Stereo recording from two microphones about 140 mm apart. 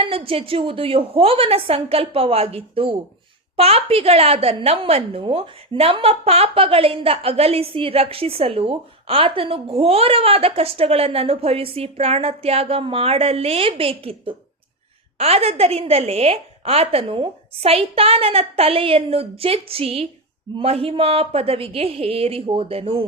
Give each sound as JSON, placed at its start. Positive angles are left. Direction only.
{"t": 0.0, "sound": "a woman's voice", "side_deg": -40}